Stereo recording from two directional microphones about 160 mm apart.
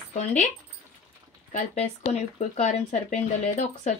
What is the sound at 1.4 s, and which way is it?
Speech, 50° left (ahead or behind).